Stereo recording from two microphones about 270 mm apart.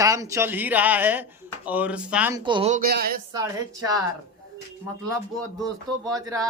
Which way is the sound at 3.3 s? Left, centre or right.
Centre.